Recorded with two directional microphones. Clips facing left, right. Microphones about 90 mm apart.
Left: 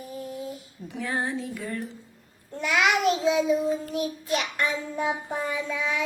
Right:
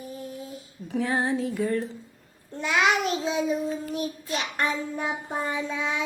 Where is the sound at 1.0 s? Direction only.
25° right (ahead or behind).